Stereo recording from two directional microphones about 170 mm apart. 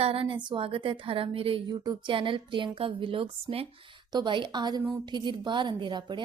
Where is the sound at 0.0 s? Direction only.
35° right (ahead or behind).